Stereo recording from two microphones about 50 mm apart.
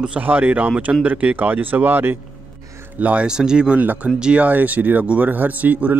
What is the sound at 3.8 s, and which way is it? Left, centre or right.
Speech, right.